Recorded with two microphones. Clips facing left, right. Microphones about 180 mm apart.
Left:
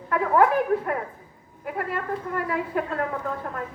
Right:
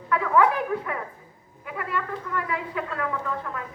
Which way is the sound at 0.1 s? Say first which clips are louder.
Left 1 dB; 50° left (ahead or behind).